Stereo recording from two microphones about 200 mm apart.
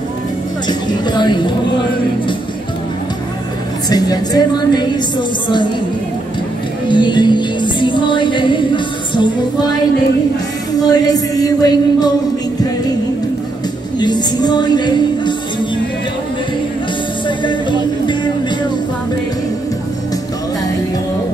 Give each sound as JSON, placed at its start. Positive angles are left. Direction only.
{"t": 0.7, "sound": "a woman's voice", "side_deg": 20}
{"t": 3.9, "sound": "music", "side_deg": 20}
{"t": 6.9, "sound": "music", "side_deg": 25}
{"t": 10.8, "sound": "music", "side_deg": 20}
{"t": 13.9, "sound": "music", "side_deg": 20}
{"t": 17.4, "sound": "music", "side_deg": 25}